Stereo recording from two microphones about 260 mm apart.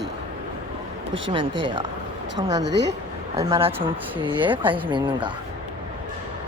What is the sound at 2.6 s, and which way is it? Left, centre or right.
Speech, right.